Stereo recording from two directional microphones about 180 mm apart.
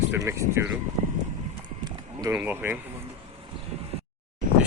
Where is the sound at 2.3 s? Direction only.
10° right (ahead or behind).